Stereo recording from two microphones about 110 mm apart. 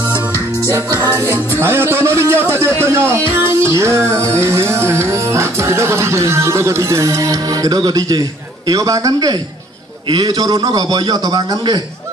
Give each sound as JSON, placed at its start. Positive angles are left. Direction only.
{"t": 0.0, "sound": "music", "side_deg": 25}
{"t": 1.0, "sound": "a man's voice", "side_deg": -30}